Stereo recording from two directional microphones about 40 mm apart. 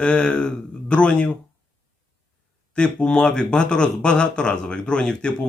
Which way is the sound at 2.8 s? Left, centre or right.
Left.